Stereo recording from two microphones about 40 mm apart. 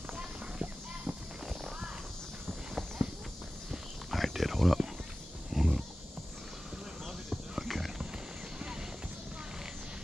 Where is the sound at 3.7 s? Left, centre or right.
Centre.